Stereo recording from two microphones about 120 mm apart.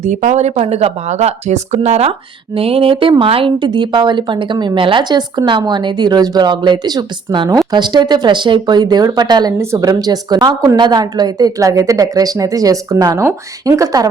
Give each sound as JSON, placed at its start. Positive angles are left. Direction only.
{"t": 0.0, "sound": "speech", "side_deg": -90}
{"t": 2.6, "sound": "a woman's voice", "side_deg": -50}